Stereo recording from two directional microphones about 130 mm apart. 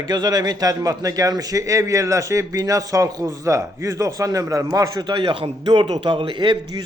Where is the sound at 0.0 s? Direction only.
30° right (ahead or behind).